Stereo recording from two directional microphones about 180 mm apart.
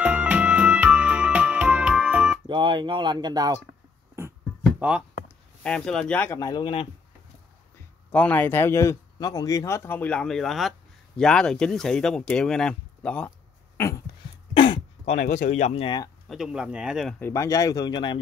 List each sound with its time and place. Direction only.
0.0 s music: 10° right (ahead or behind)
2.4 s speech: 25° right (ahead or behind)
4.2 s beatboxing: 15° right (ahead or behind)
4.7 s speech: 5° right (ahead or behind)
5.6 s speech: 5° left (ahead or behind)
6.4 s speech: 25° left (ahead or behind)
8.1 s speech: 10° left (ahead or behind)
13.7 s a sound: 15° left (ahead or behind)
14.5 s throat clearing: 30° left (ahead or behind)
15.4 s speech: 40° left (ahead or behind)
16.3 s speech: 5° right (ahead or behind)
17.2 s speech: 15° left (ahead or behind)